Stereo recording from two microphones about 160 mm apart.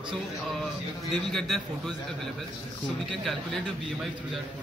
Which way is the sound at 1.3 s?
Centre (ahead or behind).